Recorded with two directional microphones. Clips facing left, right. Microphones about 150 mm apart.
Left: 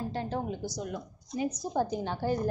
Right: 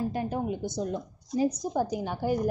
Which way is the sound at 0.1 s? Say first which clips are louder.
Right 3 dB; 15° right (ahead or behind).